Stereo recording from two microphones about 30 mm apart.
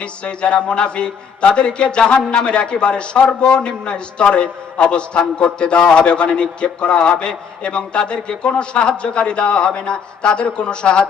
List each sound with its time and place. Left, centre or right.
0.0 s a man's voice: left